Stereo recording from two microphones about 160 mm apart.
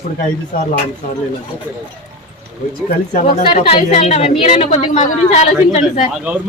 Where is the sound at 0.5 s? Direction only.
60° left (ahead or behind).